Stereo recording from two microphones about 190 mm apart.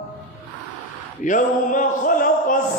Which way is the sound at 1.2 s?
40° left (ahead or behind).